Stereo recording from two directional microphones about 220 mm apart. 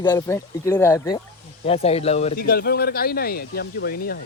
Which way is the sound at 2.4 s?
45° left (ahead or behind).